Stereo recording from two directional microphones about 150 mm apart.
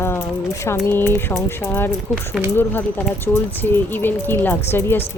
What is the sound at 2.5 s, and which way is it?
Speech, 15° left (ahead or behind).